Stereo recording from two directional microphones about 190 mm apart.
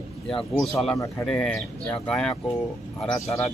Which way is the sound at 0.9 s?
15° left (ahead or behind).